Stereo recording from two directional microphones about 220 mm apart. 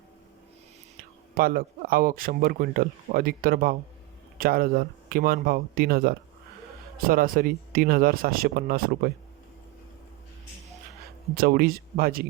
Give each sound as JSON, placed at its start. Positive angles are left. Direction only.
{"t": 1.4, "sound": "speech", "side_deg": -40}
{"t": 11.3, "sound": "speech", "side_deg": -40}